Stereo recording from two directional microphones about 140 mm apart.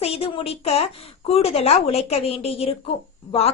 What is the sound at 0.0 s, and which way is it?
A woman's voice, 45° left (ahead or behind).